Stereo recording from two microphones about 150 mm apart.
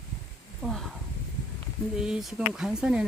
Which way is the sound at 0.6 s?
Centre (ahead or behind).